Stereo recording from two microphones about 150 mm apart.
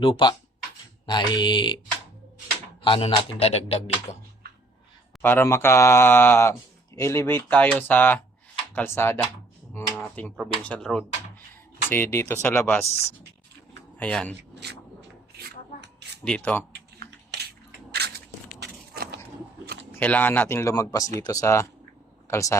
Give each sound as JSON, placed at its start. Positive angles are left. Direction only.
{"t": 0.0, "sound": "speech", "side_deg": 35}
{"t": 2.8, "sound": "speech", "side_deg": 35}
{"t": 5.2, "sound": "speech", "side_deg": 15}
{"t": 9.7, "sound": "a sound", "side_deg": 15}
{"t": 10.2, "sound": "speech", "side_deg": 10}
{"t": 14.0, "sound": "speech", "side_deg": 5}
{"t": 16.2, "sound": "speech", "side_deg": 5}
{"t": 17.0, "sound": "a sound", "side_deg": -90}
{"t": 18.6, "sound": "a sound", "side_deg": -90}
{"t": 19.9, "sound": "speech", "side_deg": 10}